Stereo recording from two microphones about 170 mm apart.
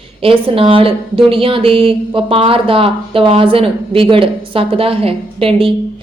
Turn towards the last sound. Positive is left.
turn(degrees=-35)  # may be behind; listen again after turning